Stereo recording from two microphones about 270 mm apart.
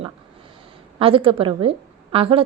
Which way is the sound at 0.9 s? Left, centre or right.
Centre.